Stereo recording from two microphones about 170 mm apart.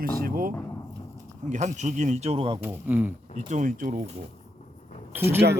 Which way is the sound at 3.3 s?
45° right (ahead or behind).